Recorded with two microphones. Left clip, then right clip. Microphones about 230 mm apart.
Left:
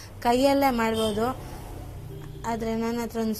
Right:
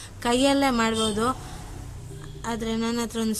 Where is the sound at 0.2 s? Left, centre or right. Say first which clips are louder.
Left 1 dB; centre.